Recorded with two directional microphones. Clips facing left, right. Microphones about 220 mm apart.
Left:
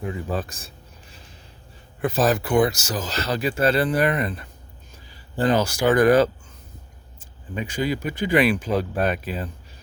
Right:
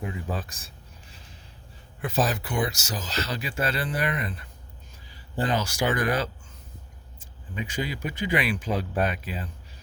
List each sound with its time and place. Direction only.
0.3 s speech: 55° left (ahead or behind)
2.0 s speech: 50° left (ahead or behind)
3.5 s speech: 30° left (ahead or behind)
3.9 s speech: 45° left (ahead or behind)
5.5 s speech: 45° left (ahead or behind)
7.5 s speech: 45° left (ahead or behind)